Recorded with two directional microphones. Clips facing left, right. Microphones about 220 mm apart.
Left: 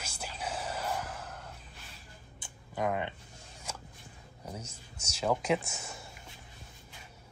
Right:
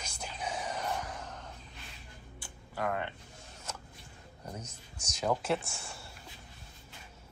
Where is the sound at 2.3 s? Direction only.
20° left (ahead or behind).